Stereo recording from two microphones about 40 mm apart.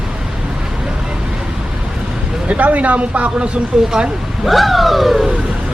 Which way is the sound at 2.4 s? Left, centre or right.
Right.